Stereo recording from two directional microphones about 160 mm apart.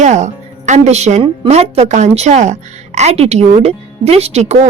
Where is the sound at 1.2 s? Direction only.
40° right (ahead or behind).